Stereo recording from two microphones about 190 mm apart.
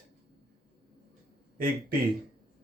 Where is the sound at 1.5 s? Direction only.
45° right (ahead or behind).